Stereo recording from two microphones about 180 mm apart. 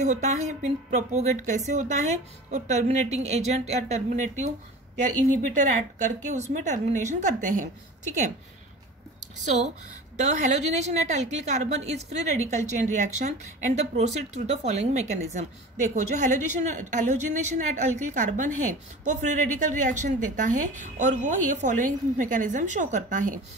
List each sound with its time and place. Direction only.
0.0 s speech: 40° right (ahead or behind)
5.5 s a woman's voice: 45° right (ahead or behind)
9.4 s a woman's voice: 40° right (ahead or behind)